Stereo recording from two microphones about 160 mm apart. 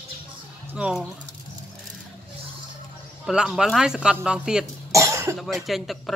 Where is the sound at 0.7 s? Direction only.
5° right (ahead or behind).